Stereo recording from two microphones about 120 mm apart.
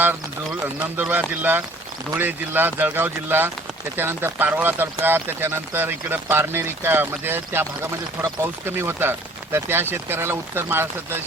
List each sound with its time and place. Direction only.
0.9 s speech: 15° right (ahead or behind)